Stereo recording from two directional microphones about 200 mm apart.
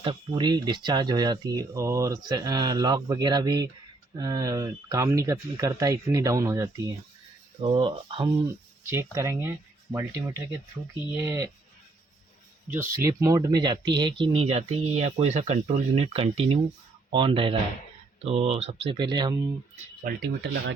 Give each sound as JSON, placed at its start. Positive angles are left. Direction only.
{"t": 0.0, "sound": "speech", "side_deg": -20}
{"t": 8.9, "sound": "speech", "side_deg": -15}
{"t": 12.7, "sound": "speech", "side_deg": -15}
{"t": 20.1, "sound": "speech", "side_deg": -50}